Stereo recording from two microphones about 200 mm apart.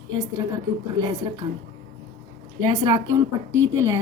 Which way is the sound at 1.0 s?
20° right (ahead or behind).